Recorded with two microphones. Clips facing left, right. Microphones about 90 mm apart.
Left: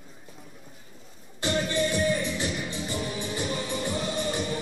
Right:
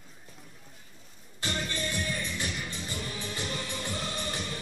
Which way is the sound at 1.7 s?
20° left (ahead or behind).